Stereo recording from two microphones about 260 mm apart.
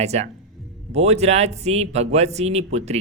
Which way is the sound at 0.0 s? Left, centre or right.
Right.